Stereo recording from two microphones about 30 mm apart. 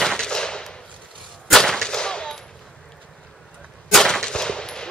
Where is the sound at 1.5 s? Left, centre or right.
Centre.